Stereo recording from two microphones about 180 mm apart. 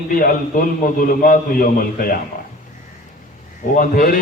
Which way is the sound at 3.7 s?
50° left (ahead or behind).